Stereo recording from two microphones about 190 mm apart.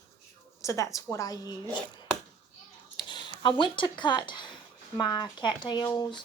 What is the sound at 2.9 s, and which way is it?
Speech, 25° left (ahead or behind).